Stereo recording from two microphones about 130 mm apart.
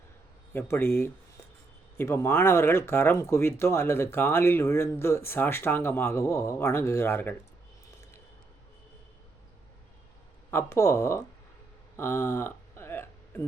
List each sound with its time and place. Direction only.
0.5 s speech: 15° left (ahead or behind)
10.5 s speech: 20° left (ahead or behind)
11.9 s a sound: 20° left (ahead or behind)